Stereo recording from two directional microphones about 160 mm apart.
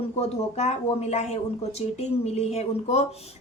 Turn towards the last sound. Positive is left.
turn(degrees=40)  # may be behind; listen again after turning